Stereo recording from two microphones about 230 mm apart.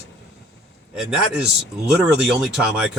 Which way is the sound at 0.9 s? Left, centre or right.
Centre.